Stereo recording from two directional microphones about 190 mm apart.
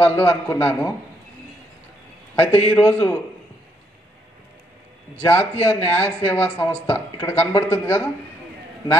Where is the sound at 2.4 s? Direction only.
10° left (ahead or behind).